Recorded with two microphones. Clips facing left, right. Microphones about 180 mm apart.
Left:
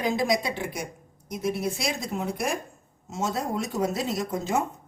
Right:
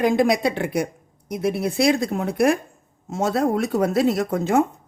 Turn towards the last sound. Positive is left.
turn(degrees=-60)  # may be behind; listen again after turning